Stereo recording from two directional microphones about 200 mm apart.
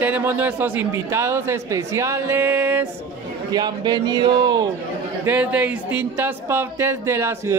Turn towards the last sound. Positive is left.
turn(degrees=-10)  # may be behind; listen again after turning